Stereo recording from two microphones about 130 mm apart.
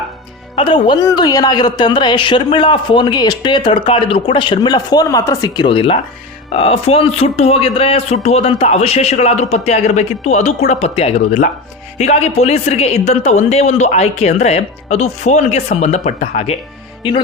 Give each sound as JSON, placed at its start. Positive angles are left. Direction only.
{"t": 0.5, "sound": "speech", "side_deg": 40}
{"t": 5.6, "sound": "a woman's voice", "side_deg": 45}